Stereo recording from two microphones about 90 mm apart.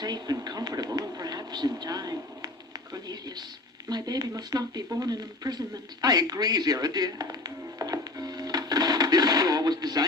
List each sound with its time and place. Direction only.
0.0 s speech: 50° right (ahead or behind)
0.9 s music: 45° right (ahead or behind)
2.9 s speech: 50° right (ahead or behind)
3.8 s a sound: 50° right (ahead or behind)